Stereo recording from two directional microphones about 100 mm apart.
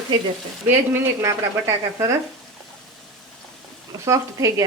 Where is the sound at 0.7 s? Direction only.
25° right (ahead or behind).